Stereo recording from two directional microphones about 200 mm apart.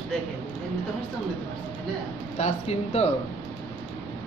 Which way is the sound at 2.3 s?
35° left (ahead or behind).